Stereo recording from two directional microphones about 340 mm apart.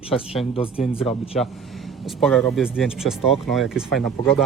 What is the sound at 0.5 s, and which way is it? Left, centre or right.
Speech, centre.